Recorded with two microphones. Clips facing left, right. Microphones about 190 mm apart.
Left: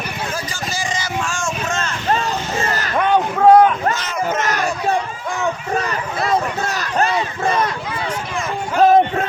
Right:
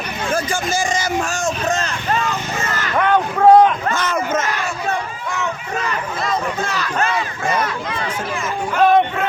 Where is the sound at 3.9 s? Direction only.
50° right (ahead or behind).